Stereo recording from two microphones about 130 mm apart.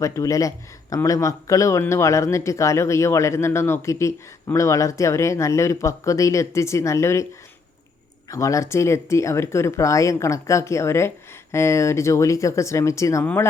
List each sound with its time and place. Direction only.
0.0 s speech: 25° left (ahead or behind)
8.3 s speech: 25° left (ahead or behind)